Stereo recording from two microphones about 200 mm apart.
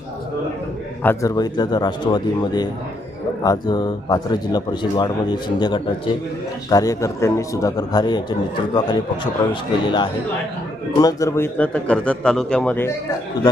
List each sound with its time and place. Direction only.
1.0 s a man's voice: 15° left (ahead or behind)